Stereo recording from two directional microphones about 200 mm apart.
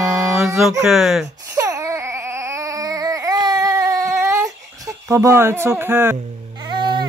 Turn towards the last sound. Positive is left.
turn(degrees=-25)  # may be behind; listen again after turning